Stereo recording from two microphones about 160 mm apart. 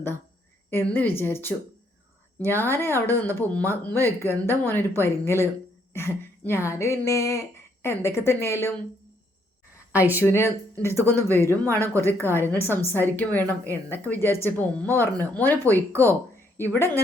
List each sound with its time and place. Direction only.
0.7 s speech: 15° left (ahead or behind)
2.6 s speech: 15° left (ahead or behind)
10.2 s speech: 15° left (ahead or behind)